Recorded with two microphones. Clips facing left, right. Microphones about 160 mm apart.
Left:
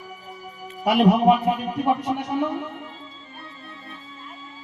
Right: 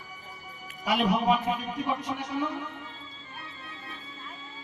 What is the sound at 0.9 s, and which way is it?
Speech, 65° left (ahead or behind).